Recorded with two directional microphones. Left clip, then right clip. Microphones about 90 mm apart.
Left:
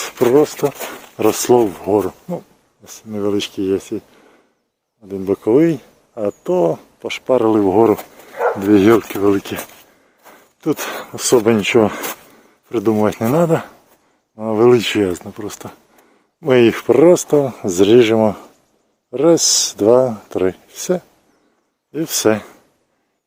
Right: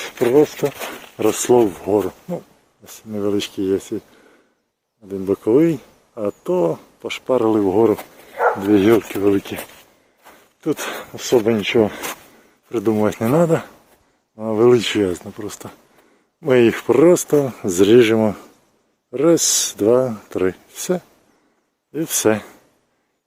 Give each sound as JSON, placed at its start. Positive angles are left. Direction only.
{"t": 0.0, "sound": "speech", "side_deg": 70}
{"t": 0.7, "sound": "a sound", "side_deg": 40}
{"t": 1.0, "sound": "speech", "side_deg": 25}
{"t": 2.8, "sound": "speech", "side_deg": 0}
{"t": 8.1, "sound": "dog", "side_deg": 50}
{"t": 8.4, "sound": "speech", "side_deg": 55}
{"t": 9.4, "sound": "speech", "side_deg": 65}
{"t": 10.2, "sound": "dog", "side_deg": 40}
{"t": 11.0, "sound": "speech", "side_deg": 80}
{"t": 12.6, "sound": "speech", "side_deg": 25}
{"t": 13.1, "sound": "speech", "side_deg": 5}